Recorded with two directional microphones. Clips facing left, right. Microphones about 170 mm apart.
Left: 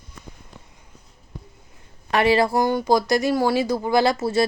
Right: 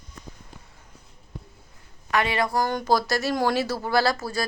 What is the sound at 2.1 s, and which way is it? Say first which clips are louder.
Speech: left 6 dB; 30° left (ahead or behind).